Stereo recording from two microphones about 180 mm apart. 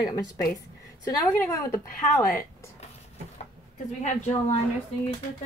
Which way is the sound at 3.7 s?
40° left (ahead or behind).